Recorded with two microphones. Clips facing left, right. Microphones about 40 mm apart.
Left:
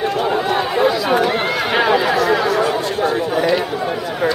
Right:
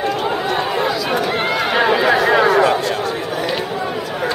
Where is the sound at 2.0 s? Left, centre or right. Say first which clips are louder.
Right 2 dB; right.